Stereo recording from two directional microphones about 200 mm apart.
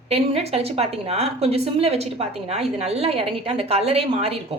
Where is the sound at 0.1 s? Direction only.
30° right (ahead or behind).